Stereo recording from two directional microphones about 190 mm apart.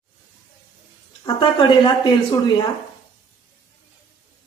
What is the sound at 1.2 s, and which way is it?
Speech, 25° left (ahead or behind).